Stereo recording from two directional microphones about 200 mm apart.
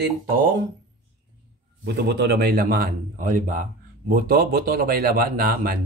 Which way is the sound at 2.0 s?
55° right (ahead or behind).